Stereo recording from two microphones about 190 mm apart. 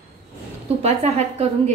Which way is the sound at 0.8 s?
35° right (ahead or behind).